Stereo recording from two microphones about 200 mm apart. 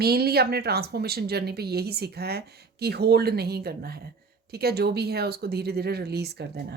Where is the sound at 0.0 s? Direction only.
50° right (ahead or behind).